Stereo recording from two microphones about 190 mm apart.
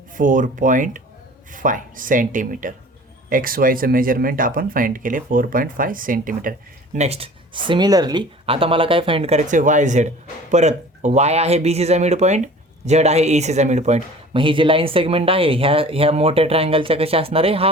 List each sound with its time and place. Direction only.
0.1 s speech: 45° right (ahead or behind)
6.9 s speech: 35° right (ahead or behind)